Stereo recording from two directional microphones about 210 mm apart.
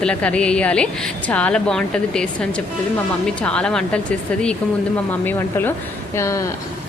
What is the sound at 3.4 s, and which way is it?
Speech, 5° left (ahead or behind).